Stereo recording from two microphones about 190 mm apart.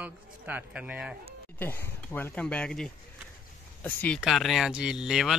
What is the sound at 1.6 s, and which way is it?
Speech, 10° left (ahead or behind).